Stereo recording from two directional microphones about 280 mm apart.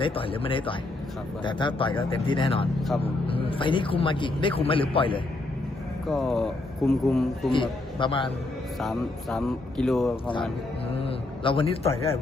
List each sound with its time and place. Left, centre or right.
0.0 s a man's voice: centre
6.1 s speech: centre
7.5 s speech: centre
8.8 s speech: centre
10.9 s a man's voice: centre